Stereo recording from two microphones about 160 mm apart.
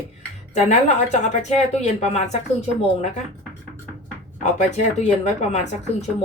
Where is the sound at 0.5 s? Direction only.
45° left (ahead or behind).